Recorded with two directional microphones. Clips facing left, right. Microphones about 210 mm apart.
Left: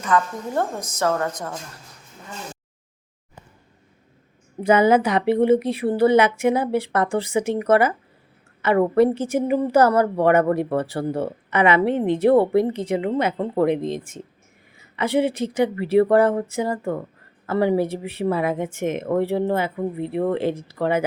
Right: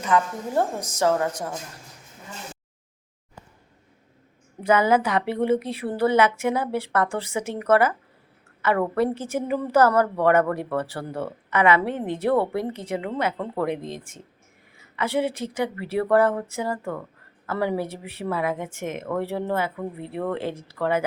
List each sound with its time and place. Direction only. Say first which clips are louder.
0.0 s a woman's voice: left 1 dB; 15° right (ahead or behind)
4.6 s a woman's voice: left 4 dB; 20° left (ahead or behind)